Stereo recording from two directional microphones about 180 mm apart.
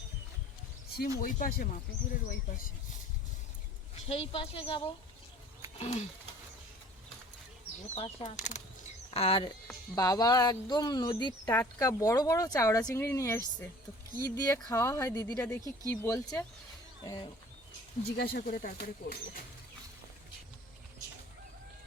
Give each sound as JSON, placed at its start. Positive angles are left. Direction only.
{"t": 0.9, "sound": "speech", "side_deg": 55}
{"t": 4.1, "sound": "speech", "side_deg": 30}
{"t": 7.9, "sound": "speech", "side_deg": 30}
{"t": 8.4, "sound": "speech", "side_deg": 45}
{"t": 9.9, "sound": "speech", "side_deg": 20}
{"t": 18.0, "sound": "speech", "side_deg": 60}